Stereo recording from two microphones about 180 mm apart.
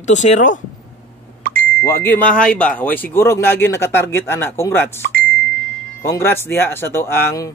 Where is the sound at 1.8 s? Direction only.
10° left (ahead or behind).